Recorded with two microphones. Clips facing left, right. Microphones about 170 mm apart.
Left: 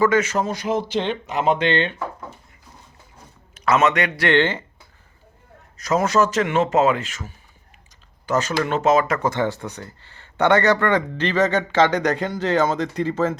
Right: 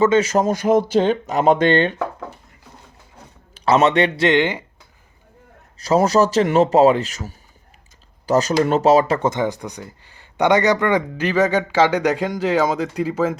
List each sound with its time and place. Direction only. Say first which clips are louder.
0.0 s speech: right 3 dB; 25° right (ahead or behind)
0.3 s speech: right 6 dB; 45° right (ahead or behind)
3.5 s a man's voice: right 3 dB; 30° right (ahead or behind)
4.3 s speech: right 1 dB; 15° right (ahead or behind)
5.7 s speech: right 3 dB; 30° right (ahead or behind)
9.3 s speech: right 1 dB; 15° right (ahead or behind)